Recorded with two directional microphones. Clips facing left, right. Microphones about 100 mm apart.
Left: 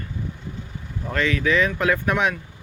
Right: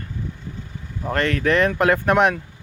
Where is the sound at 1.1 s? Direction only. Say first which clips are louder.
Right 2 dB; 55° right (ahead or behind).